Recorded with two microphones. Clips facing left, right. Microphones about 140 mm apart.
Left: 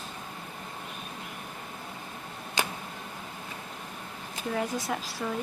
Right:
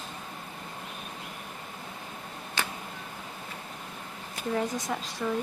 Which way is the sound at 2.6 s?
15° left (ahead or behind).